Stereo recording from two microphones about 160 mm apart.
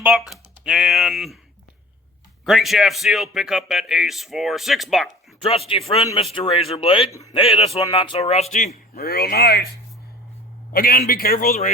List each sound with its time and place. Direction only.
0.0 s speech: centre (ahead or behind)
2.4 s speech: centre (ahead or behind)
5.4 s speech: 35° left (ahead or behind)
9.0 s speech: 75° left (ahead or behind)
10.7 s a man's voice: 65° left (ahead or behind)